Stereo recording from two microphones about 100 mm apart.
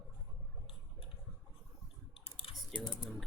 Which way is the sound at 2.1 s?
65° left (ahead or behind).